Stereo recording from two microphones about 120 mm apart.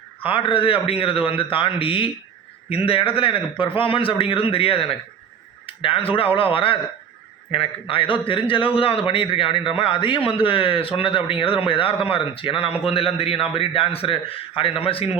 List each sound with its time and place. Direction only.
0.2 s a man's voice: 45° left (ahead or behind)